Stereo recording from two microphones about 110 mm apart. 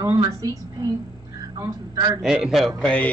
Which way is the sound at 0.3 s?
30° right (ahead or behind).